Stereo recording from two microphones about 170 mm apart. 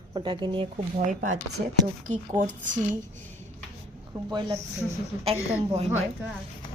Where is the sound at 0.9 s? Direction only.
50° right (ahead or behind).